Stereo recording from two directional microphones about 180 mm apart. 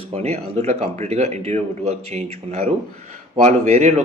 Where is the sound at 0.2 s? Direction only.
35° right (ahead or behind).